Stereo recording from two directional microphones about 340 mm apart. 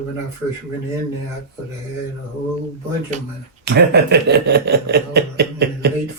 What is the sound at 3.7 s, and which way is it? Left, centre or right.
Speech, right.